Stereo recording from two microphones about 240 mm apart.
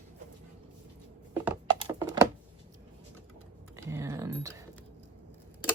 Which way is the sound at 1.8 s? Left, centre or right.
Centre.